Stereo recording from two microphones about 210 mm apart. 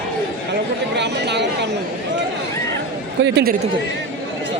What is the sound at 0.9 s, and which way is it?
Chatter, 55° right (ahead or behind).